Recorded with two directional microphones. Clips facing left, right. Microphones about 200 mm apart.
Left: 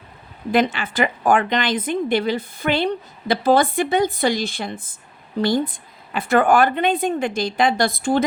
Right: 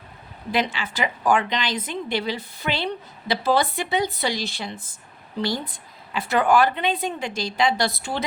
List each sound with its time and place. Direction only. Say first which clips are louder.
0.5 s a woman's voice: left 6 dB; 50° left (ahead or behind)